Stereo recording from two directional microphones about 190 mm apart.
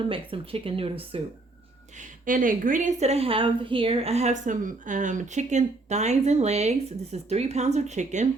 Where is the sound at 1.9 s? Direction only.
45° right (ahead or behind).